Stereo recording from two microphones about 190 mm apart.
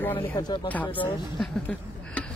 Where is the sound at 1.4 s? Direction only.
5° left (ahead or behind).